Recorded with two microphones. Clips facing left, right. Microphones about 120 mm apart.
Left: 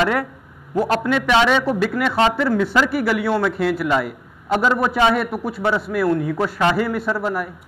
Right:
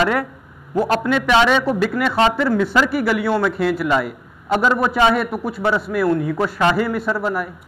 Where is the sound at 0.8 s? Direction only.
50° right (ahead or behind).